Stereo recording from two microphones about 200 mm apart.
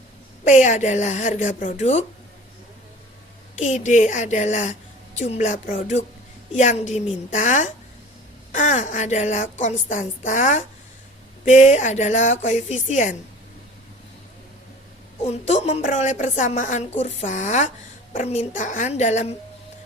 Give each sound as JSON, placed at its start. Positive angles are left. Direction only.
{"t": 0.4, "sound": "a woman's voice", "side_deg": 35}
{"t": 3.6, "sound": "a woman's voice", "side_deg": 35}
{"t": 15.2, "sound": "a woman's voice", "side_deg": 35}